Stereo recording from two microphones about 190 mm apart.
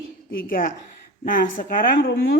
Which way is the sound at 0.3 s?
50° left (ahead or behind).